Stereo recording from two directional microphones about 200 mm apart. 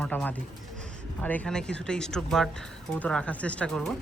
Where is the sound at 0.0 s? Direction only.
10° left (ahead or behind).